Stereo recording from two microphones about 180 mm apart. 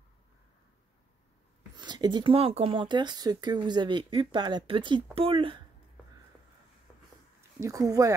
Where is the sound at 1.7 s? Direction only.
25° right (ahead or behind).